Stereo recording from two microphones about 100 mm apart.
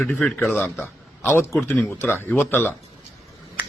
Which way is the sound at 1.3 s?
25° left (ahead or behind).